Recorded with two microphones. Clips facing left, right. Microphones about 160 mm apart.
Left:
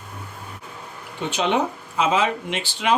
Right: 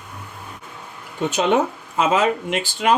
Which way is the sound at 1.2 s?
45° right (ahead or behind).